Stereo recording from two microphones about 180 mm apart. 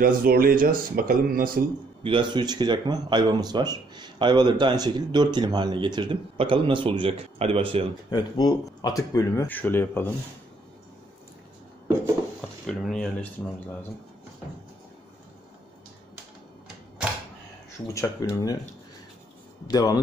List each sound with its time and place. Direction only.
0.0 s speech: 55° right (ahead or behind)
2.0 s speech: 25° right (ahead or behind)
8.1 s speech: 20° left (ahead or behind)
12.6 s speech: 5° left (ahead or behind)
17.8 s speech: 15° left (ahead or behind)
19.7 s speech: 20° left (ahead or behind)